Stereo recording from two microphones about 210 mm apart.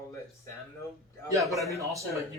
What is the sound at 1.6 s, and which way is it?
Speech, 15° right (ahead or behind).